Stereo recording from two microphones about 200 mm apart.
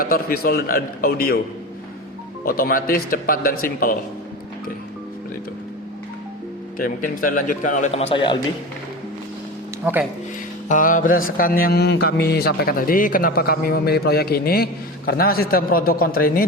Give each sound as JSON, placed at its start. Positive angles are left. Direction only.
{"t": 0.0, "sound": "a man's voice", "side_deg": 50}
{"t": 2.4, "sound": "a man's voice", "side_deg": 45}
{"t": 6.7, "sound": "a man's voice", "side_deg": 45}
{"t": 8.1, "sound": "a man's voice", "side_deg": 25}
{"t": 9.8, "sound": "speech", "side_deg": -10}
{"t": 10.7, "sound": "a man's voice", "side_deg": 40}